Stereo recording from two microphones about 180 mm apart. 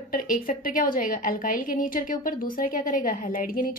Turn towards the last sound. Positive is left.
turn(degrees=50)  # may be behind; listen again after turning